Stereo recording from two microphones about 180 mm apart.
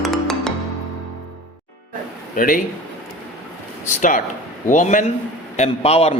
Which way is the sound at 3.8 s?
45° left (ahead or behind).